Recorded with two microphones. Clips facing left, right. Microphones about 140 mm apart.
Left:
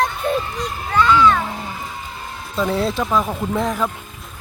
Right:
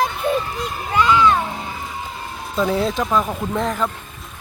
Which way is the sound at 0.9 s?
15° right (ahead or behind).